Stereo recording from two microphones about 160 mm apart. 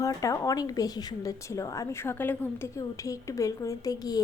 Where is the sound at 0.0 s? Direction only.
20° left (ahead or behind).